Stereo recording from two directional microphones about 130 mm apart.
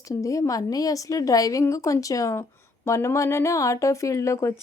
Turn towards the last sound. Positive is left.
turn(degrees=25)  # may be behind; listen again after turning